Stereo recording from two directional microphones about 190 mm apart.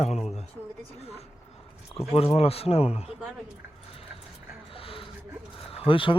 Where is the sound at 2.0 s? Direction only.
30° left (ahead or behind).